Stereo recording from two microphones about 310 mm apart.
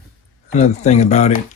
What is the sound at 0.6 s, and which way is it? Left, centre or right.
Speech, left.